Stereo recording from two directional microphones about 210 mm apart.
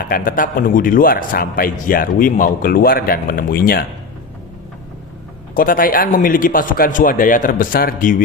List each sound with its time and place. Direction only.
0.0 s a man's voice: 40° left (ahead or behind)
5.5 s speech: 40° left (ahead or behind)